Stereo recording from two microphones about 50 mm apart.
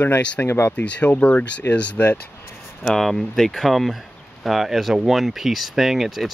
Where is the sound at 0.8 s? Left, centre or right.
Left.